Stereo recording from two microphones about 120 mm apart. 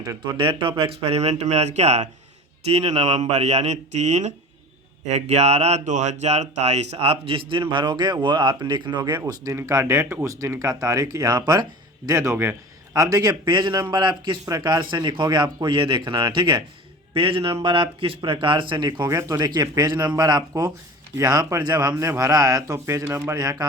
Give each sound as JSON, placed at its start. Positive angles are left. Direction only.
{"t": 0.3, "sound": "speech", "side_deg": -45}
{"t": 12.0, "sound": "a man's voice", "side_deg": -25}